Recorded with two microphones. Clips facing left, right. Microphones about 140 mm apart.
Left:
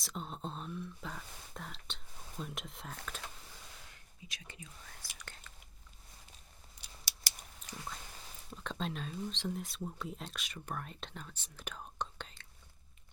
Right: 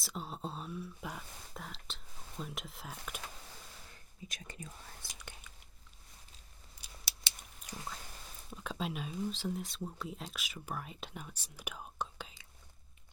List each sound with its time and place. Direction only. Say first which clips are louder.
0.0 s speech: right 1 dB; 5° right (ahead or behind)
4.3 s speech: right 3 dB; 45° right (ahead or behind)
5.2 s biting: even; 15° right (ahead or behind)
7.6 s a sound: right 1 dB; 5° right (ahead or behind)
8.4 s speech: right 1 dB; 5° right (ahead or behind)
11.5 s whispering: even; 10° right (ahead or behind)